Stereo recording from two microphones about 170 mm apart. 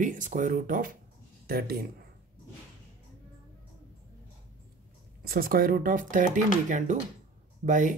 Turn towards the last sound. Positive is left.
turn(degrees=-50)  # may be behind; listen again after turning